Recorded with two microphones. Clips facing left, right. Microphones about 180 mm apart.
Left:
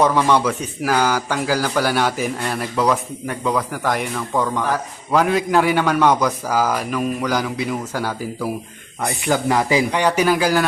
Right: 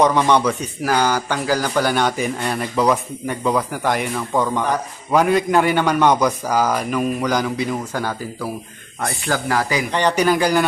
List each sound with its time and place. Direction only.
0.0 s a man's voice: 5° left (ahead or behind); by 9.8 s 20° left (ahead or behind)
9.9 s a man's voice: 10° left (ahead or behind)